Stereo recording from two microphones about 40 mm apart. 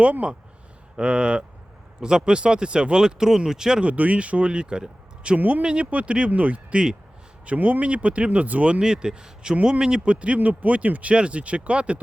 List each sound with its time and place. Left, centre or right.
0.0 s speech: right; by 3.8 s centre
3.8 s speech: right
8.8 s speech: centre
10.0 s speech: right